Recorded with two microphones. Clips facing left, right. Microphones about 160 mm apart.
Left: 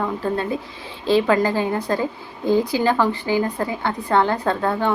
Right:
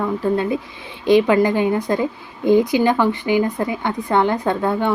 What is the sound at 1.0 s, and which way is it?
A woman's voice, 15° right (ahead or behind).